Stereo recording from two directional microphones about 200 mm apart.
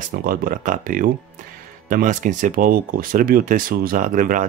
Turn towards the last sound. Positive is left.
turn(degrees=-40)  # may be behind; listen again after turning